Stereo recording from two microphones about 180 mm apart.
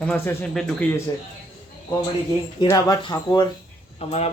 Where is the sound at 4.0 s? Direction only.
35° left (ahead or behind).